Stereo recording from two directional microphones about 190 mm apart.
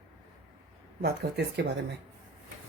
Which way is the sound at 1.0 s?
60° right (ahead or behind).